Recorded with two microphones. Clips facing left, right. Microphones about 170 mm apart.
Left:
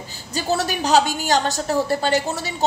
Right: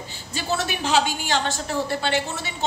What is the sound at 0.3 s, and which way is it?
A woman's voice, 40° left (ahead or behind).